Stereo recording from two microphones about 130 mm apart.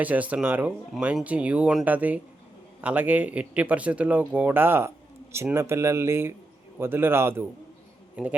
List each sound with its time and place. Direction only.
0.0 s speech: 10° right (ahead or behind)